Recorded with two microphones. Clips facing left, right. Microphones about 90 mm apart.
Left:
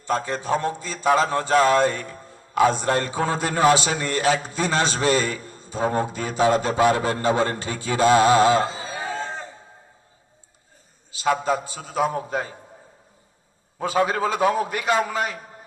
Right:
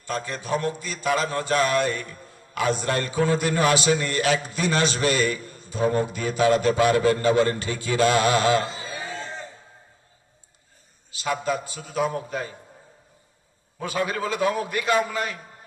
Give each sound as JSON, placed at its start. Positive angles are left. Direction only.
{"t": 0.0, "sound": "a man's voice", "side_deg": 25}
{"t": 11.2, "sound": "a man's voice", "side_deg": 25}
{"t": 13.7, "sound": "a man's voice", "side_deg": 25}